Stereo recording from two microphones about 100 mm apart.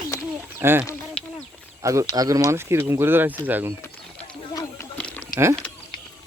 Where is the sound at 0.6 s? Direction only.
20° right (ahead or behind).